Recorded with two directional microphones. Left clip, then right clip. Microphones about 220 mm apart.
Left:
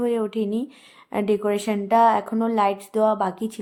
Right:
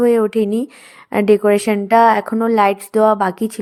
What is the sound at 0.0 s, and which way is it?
A woman's voice, 25° right (ahead or behind).